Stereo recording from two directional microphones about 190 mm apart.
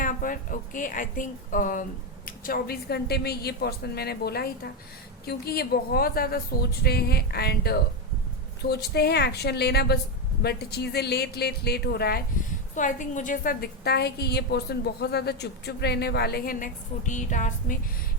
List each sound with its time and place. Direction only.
0.0 s a woman's voice: 45° left (ahead or behind)
12.7 s a woman's voice: 40° left (ahead or behind)